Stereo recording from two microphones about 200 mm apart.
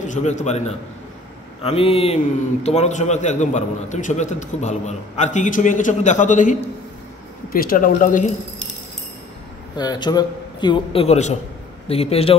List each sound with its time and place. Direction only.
0.1 s a man's voice: 35° left (ahead or behind)
9.8 s a man's voice: 20° left (ahead or behind)